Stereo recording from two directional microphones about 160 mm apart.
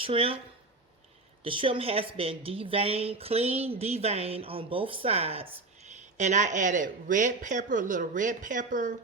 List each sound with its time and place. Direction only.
0.0 s a woman's voice: 35° right (ahead or behind)
1.5 s a woman's voice: 35° right (ahead or behind); by 9.0 s 55° right (ahead or behind)